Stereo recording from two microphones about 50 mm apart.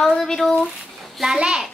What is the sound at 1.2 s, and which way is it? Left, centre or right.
Speech, centre.